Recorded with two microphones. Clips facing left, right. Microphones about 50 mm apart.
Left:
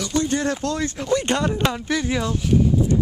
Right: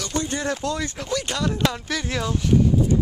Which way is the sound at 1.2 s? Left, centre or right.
Left.